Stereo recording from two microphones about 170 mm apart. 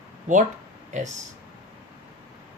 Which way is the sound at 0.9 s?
45° right (ahead or behind).